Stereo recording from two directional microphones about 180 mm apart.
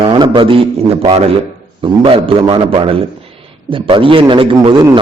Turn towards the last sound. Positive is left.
turn(degrees=-25)  # may be behind; listen again after turning